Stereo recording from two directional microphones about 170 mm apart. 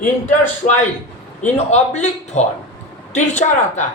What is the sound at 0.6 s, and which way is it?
A man's voice, 45° left (ahead or behind).